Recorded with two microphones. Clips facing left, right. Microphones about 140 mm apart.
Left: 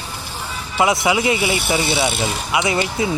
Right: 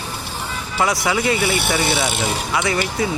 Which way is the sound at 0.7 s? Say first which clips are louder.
Left 3 dB; 25° left (ahead or behind).